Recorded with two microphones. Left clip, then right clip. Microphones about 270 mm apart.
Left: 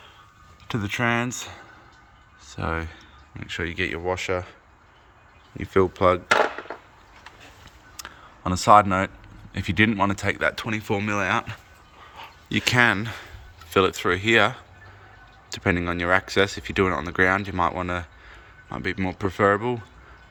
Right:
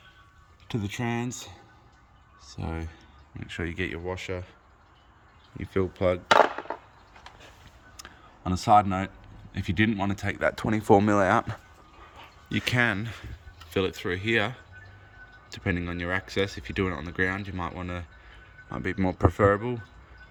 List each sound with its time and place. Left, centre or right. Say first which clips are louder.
0.7 s speech: left 8 dB; centre
5.5 s speech: left 8 dB; centre
6.3 s wood: right 1 dB; right
7.9 s speech: left 7 dB; centre